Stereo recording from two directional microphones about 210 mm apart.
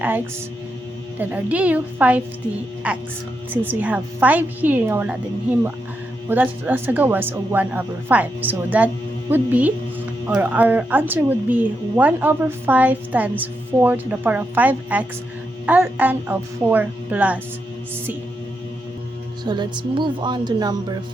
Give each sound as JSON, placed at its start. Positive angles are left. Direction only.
{"t": 1.2, "sound": "speech", "side_deg": -5}
{"t": 19.5, "sound": "speech", "side_deg": -20}